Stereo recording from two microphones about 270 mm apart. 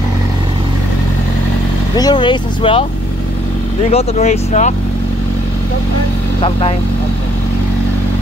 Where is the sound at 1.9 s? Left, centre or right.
Centre.